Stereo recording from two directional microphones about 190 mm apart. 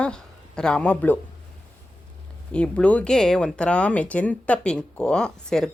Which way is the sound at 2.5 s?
5° left (ahead or behind).